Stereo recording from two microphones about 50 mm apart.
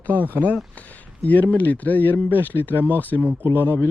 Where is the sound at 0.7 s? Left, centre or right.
Left.